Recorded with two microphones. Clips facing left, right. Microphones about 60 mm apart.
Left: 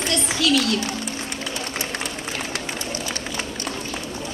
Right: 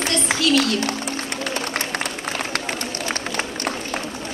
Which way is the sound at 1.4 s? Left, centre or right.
Right.